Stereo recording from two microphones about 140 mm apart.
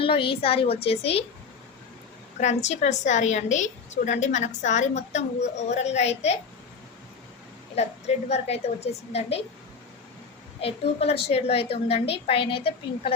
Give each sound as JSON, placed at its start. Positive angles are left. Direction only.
{"t": 0.0, "sound": "a woman's voice", "side_deg": 40}
{"t": 2.4, "sound": "a woman's voice", "side_deg": 55}
{"t": 7.8, "sound": "a woman's voice", "side_deg": 50}
{"t": 10.6, "sound": "a woman's voice", "side_deg": 45}